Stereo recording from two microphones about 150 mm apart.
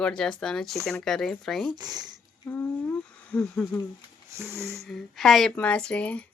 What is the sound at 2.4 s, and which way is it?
Speech, 15° left (ahead or behind).